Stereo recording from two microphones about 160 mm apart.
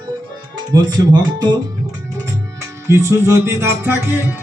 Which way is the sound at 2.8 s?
15° right (ahead or behind).